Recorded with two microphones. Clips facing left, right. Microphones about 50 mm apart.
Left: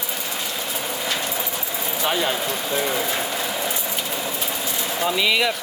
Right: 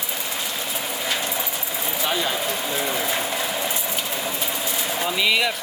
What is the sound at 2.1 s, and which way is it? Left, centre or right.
Speech, centre.